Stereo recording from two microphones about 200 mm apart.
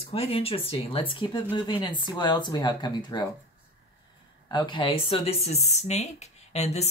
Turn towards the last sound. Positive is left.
turn(degrees=35)  # may be behind; listen again after turning